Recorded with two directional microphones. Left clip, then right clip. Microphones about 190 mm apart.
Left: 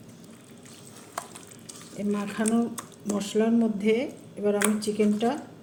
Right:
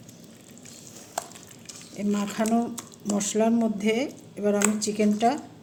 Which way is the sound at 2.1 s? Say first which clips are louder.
Right 1 dB; 55° right (ahead or behind).